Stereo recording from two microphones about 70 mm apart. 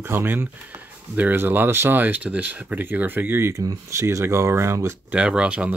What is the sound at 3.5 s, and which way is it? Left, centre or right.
Speech, right.